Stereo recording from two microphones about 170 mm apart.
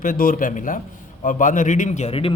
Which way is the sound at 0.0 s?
50° left (ahead or behind).